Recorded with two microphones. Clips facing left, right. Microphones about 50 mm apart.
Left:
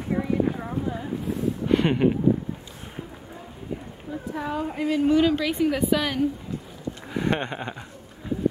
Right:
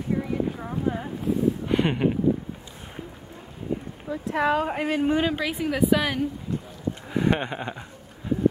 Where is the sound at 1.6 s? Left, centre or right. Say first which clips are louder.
Left 2 dB; centre.